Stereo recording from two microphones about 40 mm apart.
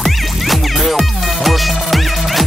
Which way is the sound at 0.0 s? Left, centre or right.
Centre.